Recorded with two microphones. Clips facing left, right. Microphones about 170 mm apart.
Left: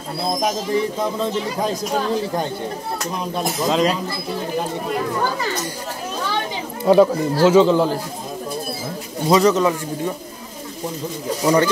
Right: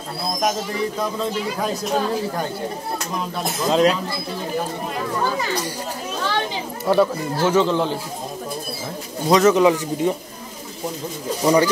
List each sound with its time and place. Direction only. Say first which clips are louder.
3.6 s speech: right 2 dB; centre (ahead or behind)
6.8 s speech: left 5 dB; 15° left (ahead or behind)
9.3 s speech: even; centre (ahead or behind)
9.6 s speech: right 3 dB; 15° right (ahead or behind)
11.4 s speech: even; 10° right (ahead or behind)